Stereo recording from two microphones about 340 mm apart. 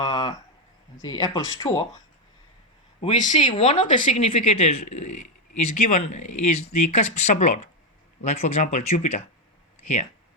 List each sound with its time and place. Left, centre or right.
0.0 s a sound: centre
1.0 s speech: centre
3.0 s speech: left
5.0 s speech: left
5.8 s speech: centre